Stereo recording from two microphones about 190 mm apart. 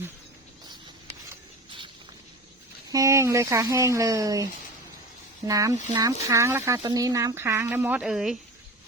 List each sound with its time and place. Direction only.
2.9 s speech: 15° right (ahead or behind)
5.5 s speech: 20° right (ahead or behind); by 8.4 s 5° right (ahead or behind)